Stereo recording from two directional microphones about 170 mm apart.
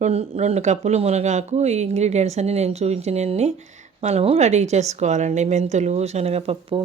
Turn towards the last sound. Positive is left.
turn(degrees=-35)  # may be behind; listen again after turning